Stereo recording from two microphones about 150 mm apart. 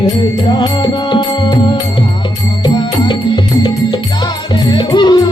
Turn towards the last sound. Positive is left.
turn(degrees=30)  # may be behind; listen again after turning